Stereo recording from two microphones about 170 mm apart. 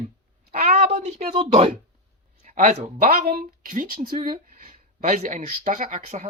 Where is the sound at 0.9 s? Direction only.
40° right (ahead or behind).